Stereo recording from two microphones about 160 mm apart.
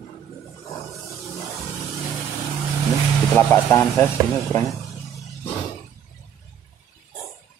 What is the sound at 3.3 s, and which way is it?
Speech, 15° left (ahead or behind).